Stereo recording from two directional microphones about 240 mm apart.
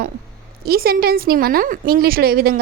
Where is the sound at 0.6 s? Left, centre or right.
Right.